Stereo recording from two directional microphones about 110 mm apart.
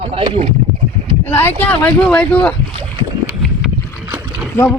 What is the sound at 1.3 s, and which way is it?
Speech, 20° left (ahead or behind).